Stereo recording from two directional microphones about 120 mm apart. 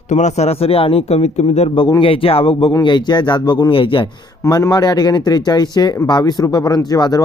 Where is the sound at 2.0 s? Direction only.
50° left (ahead or behind).